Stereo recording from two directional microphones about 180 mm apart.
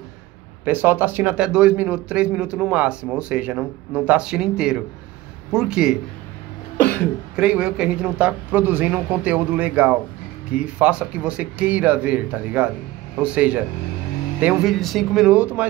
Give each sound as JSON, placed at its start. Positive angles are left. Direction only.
{"t": 0.7, "sound": "a man's voice", "side_deg": -10}
{"t": 7.3, "sound": "a man's voice", "side_deg": -5}